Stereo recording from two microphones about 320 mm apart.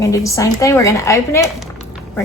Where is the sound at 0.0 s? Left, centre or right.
Centre.